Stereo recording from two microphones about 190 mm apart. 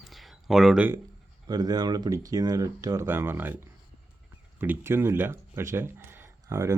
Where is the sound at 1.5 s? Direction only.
20° right (ahead or behind).